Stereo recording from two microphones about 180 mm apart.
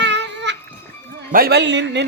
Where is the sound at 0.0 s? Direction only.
80° right.